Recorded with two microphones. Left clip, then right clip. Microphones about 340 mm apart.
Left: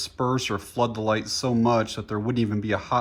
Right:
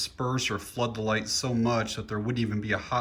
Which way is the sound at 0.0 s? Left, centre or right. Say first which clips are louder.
Left 4 dB; centre.